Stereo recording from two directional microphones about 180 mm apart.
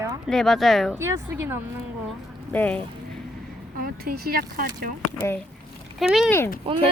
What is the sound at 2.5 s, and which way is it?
Speech, 10° left (ahead or behind).